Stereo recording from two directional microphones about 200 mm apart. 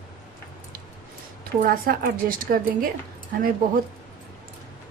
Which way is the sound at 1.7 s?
45° right (ahead or behind).